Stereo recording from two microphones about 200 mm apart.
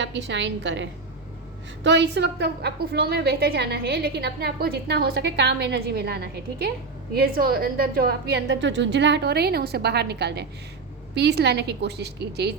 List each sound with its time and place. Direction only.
0.0 s a woman's voice: 60° right (ahead or behind)